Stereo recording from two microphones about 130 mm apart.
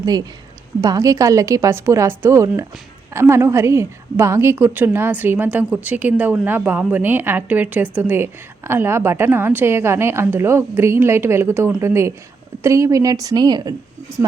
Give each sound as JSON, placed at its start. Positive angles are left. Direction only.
{"t": 0.0, "sound": "a woman's voice", "side_deg": -30}